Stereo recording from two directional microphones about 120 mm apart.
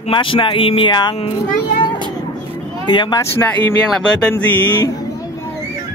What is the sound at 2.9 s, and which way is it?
Speech, 35° left (ahead or behind).